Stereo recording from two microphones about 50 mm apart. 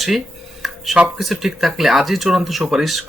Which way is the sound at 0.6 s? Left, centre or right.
Centre.